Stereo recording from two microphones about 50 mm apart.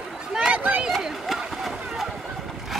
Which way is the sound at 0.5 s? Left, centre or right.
Right.